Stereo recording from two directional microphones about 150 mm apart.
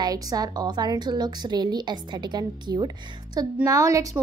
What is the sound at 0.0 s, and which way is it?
A woman's voice, 25° right (ahead or behind).